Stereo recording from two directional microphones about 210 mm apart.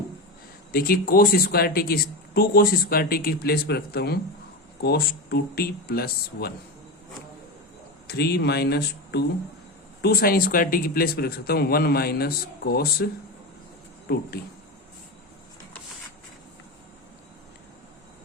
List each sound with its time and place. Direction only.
0.7 s speech: 45° left (ahead or behind)
8.0 s speech: 50° left (ahead or behind)
14.4 s speech: 50° left (ahead or behind)